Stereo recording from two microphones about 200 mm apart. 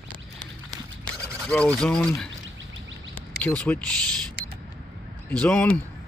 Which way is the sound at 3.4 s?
5° left (ahead or behind).